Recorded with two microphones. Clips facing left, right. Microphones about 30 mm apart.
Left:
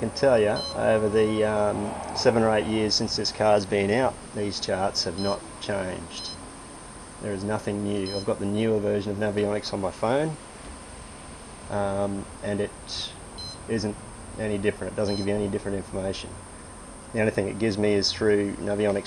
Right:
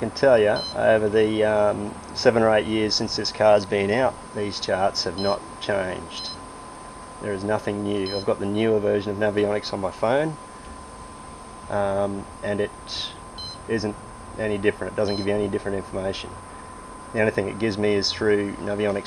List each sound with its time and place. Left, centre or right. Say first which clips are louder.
0.0 s speech: right 3 dB; centre
7.3 s speech: right 4 dB; centre
11.7 s speech: right 3 dB; centre